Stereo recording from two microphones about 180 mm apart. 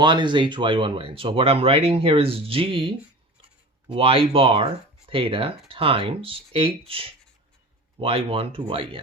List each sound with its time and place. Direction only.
0.0 s speech: 25° right (ahead or behind)